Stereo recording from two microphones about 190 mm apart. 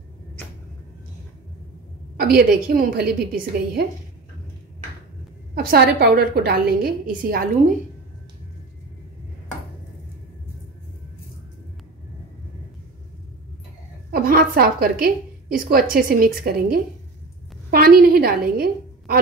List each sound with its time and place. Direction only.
2.1 s a woman's voice: 55° right (ahead or behind)
5.5 s a woman's voice: 55° right (ahead or behind)
14.1 s a sound: 50° right (ahead or behind)
15.5 s a woman's voice: 50° right (ahead or behind)